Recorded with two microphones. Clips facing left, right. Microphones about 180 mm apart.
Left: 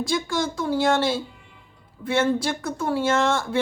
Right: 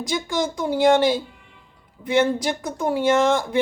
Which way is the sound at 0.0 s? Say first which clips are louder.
Right 1 dB; 15° right (ahead or behind).